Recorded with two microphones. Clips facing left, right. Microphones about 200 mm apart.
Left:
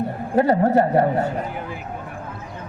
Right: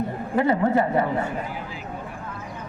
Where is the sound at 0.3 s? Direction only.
40° left (ahead or behind).